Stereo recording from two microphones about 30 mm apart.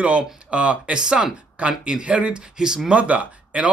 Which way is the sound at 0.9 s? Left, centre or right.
Right.